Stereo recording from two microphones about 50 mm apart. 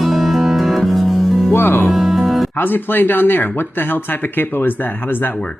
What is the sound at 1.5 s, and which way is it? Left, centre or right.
Music, left.